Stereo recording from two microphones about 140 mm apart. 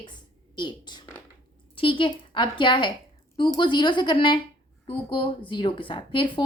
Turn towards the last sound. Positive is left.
turn(degrees=35)  # may be behind; listen again after turning